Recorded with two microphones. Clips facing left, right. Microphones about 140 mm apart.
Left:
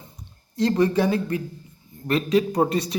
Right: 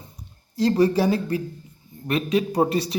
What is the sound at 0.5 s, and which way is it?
Speech, 35° right (ahead or behind).